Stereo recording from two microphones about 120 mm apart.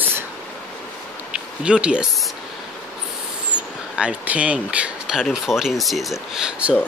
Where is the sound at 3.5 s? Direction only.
10° right (ahead or behind).